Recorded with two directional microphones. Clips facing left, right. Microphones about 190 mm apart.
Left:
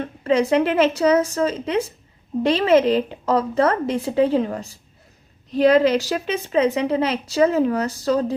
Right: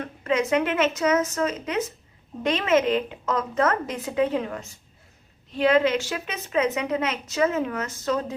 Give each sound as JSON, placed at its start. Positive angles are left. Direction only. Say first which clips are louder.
{"t": 0.0, "sound": "a woman's voice", "louder": "left 5 dB", "side_deg": 30}